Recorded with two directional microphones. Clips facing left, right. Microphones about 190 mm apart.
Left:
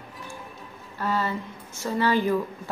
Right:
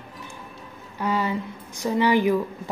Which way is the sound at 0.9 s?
15° right (ahead or behind).